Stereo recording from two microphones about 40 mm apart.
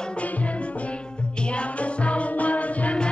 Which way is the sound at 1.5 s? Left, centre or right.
Left.